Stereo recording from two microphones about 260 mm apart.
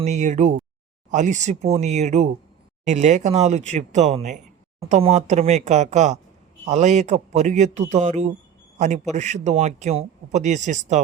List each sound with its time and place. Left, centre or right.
0.0 s a man's voice: right